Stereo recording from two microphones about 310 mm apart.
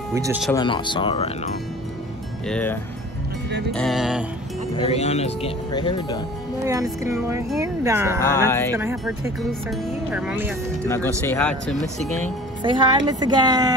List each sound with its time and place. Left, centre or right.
0.1 s speech: centre
0.5 s speech: centre
2.4 s speech: centre
4.7 s speech: centre
6.6 s speech: centre
8.2 s speech: centre
8.7 s speech: centre
10.9 s speech: centre
12.6 s speech: centre